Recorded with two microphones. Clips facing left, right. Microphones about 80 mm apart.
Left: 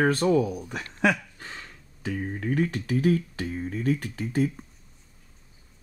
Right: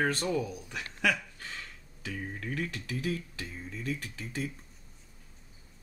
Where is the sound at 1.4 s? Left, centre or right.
Left.